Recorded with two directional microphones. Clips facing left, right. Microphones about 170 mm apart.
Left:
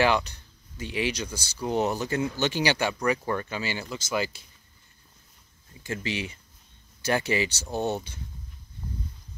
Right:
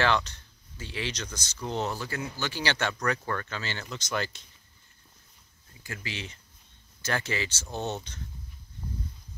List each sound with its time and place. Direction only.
0.0 s speech: 15° left (ahead or behind)
5.9 s speech: 20° left (ahead or behind)